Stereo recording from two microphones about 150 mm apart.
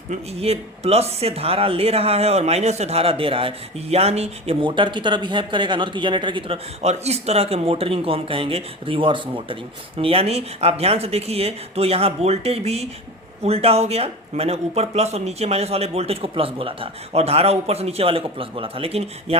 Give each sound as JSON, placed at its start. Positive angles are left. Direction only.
{"t": 0.1, "sound": "speech", "side_deg": -45}
{"t": 4.6, "sound": "speech", "side_deg": -30}
{"t": 6.8, "sound": "speech", "side_deg": -45}